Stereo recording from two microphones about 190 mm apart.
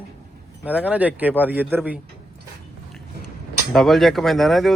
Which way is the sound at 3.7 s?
Centre (ahead or behind).